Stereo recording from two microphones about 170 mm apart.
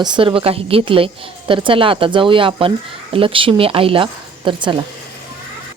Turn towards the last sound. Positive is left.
turn(degrees=-30)  # may be behind; listen again after turning